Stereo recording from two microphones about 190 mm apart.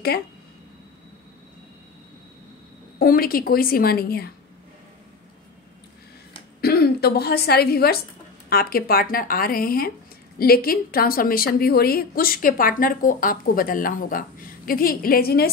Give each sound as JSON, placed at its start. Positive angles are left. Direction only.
{"t": 3.0, "sound": "a woman's voice", "side_deg": 50}
{"t": 6.6, "sound": "a woman's voice", "side_deg": 55}